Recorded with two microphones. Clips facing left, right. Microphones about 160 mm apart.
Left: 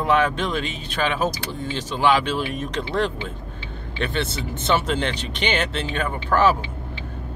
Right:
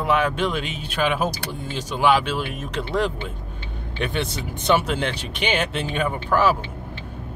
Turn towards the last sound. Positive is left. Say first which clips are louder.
# left 1 dB
turn(degrees=-10)  # may be behind; listen again after turning